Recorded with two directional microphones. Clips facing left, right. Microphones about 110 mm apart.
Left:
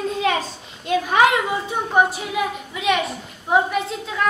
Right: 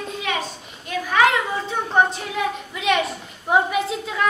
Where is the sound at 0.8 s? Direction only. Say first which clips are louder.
Left 2 dB; 20° left (ahead or behind); by 4.2 s centre (ahead or behind).